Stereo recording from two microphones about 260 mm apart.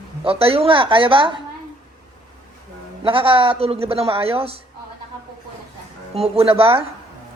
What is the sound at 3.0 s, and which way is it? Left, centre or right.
A woman's voice, centre.